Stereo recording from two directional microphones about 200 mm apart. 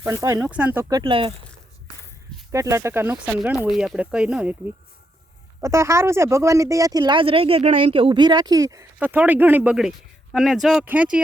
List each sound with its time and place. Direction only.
0.0 s speech: 15° right (ahead or behind)
2.5 s speech: 15° right (ahead or behind)